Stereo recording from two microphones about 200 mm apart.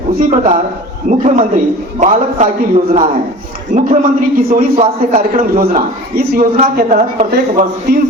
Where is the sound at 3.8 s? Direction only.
40° right (ahead or behind).